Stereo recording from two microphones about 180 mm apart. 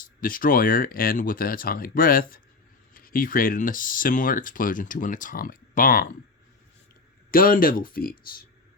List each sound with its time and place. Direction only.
0.0 s speech: 50° left (ahead or behind)
7.3 s speech: 55° left (ahead or behind)